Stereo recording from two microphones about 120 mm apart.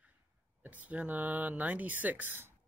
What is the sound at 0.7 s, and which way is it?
Speech, 15° right (ahead or behind).